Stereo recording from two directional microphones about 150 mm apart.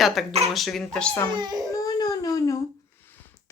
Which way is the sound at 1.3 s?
30° right (ahead or behind).